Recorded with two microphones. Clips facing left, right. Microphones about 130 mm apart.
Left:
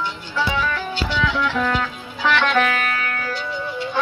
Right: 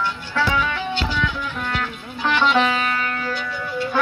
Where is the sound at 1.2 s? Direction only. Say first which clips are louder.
Left 5 dB; 90° left.